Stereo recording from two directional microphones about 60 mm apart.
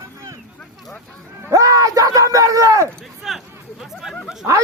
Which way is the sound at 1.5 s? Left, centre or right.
Right.